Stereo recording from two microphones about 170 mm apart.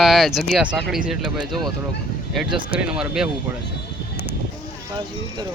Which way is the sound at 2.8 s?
5° right (ahead or behind).